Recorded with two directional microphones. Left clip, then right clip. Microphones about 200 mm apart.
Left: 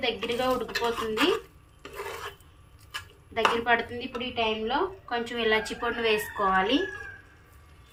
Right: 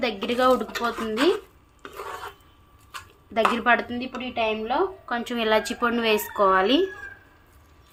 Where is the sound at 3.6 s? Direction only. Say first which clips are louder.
Right 4 dB; 60° right (ahead or behind).